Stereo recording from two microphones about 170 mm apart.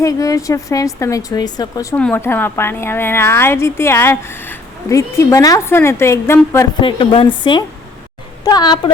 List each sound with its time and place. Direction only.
0.0 s speech: 20° left (ahead or behind)
2.0 s speech: 10° left (ahead or behind)
6.8 s speech: 30° left (ahead or behind)
8.4 s speech: 25° left (ahead or behind)